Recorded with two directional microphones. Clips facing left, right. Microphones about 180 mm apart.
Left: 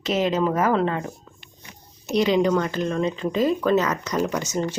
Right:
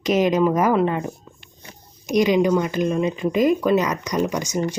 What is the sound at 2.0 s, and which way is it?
Speech, 15° right (ahead or behind).